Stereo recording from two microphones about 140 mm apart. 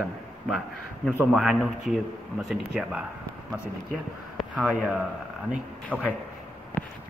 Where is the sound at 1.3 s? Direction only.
Centre (ahead or behind).